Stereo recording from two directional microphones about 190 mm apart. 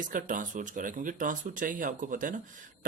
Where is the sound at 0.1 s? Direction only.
45° right (ahead or behind).